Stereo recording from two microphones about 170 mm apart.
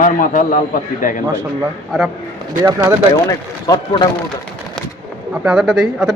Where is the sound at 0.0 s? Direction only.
50° left (ahead or behind).